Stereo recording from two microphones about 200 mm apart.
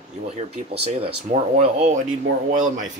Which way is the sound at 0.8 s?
30° right (ahead or behind).